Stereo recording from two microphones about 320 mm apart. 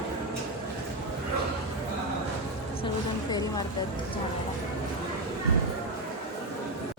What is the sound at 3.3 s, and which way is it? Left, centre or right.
Speech, centre.